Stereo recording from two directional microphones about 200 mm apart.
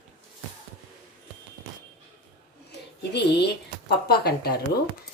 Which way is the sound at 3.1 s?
55° left (ahead or behind).